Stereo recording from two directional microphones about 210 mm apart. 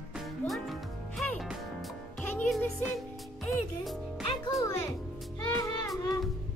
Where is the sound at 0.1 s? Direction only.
Centre (ahead or behind).